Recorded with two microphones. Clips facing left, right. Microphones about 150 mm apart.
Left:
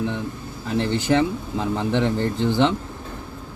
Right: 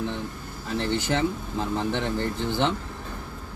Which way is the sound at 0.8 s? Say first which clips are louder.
Left 5 dB; 15° left (ahead or behind).